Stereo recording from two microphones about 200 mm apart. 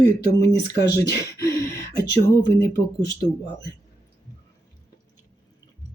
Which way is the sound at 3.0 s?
50° left (ahead or behind).